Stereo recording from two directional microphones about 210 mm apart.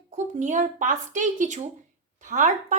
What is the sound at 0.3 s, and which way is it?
A woman's voice, 35° right (ahead or behind).